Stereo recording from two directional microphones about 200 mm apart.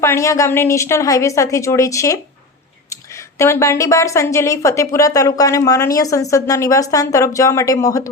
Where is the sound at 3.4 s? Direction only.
15° left (ahead or behind).